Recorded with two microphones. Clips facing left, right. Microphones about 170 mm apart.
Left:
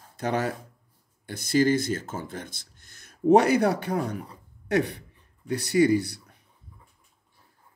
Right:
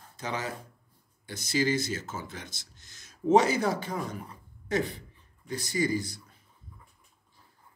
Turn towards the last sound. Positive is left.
turn(degrees=65)  # may be behind; listen again after turning